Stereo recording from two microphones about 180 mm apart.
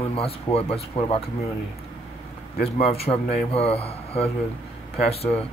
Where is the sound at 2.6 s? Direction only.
35° left (ahead or behind).